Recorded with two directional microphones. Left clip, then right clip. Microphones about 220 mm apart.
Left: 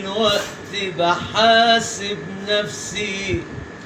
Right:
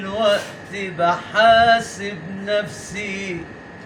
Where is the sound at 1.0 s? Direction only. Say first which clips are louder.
Right 2 dB; 10° right (ahead or behind).